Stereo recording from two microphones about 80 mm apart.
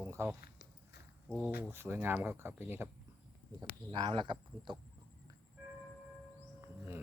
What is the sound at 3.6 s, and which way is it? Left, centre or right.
Speech, right.